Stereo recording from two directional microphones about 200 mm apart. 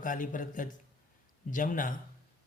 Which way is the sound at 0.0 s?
40° left (ahead or behind).